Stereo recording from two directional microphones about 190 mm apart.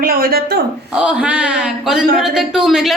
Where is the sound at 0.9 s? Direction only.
5° right (ahead or behind).